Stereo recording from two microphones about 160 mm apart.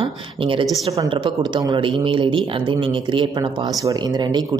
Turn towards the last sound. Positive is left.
turn(degrees=-25)  # may be behind; listen again after turning